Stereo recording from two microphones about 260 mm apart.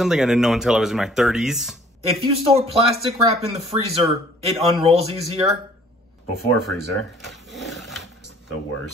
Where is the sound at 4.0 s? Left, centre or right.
Right.